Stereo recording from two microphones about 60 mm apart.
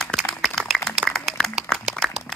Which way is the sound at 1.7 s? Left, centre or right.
Centre.